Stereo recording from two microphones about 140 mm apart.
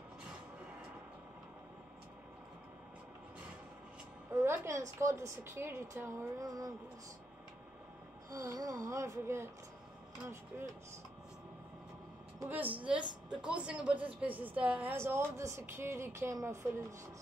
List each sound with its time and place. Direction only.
4.3 s a woman's voice: 20° right (ahead or behind)
8.3 s a woman's voice: 25° right (ahead or behind)
10.5 s a woman's voice: 10° right (ahead or behind)
12.4 s a woman's voice: 15° right (ahead or behind)